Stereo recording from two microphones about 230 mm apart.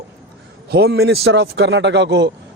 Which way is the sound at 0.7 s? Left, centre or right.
Right.